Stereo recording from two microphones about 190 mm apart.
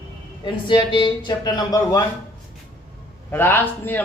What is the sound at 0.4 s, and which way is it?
Speech, 25° left (ahead or behind).